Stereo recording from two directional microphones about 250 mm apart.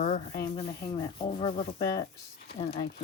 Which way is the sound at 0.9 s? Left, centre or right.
Centre.